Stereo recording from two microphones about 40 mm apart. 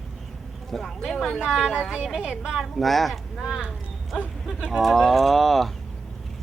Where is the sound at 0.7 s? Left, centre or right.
Centre.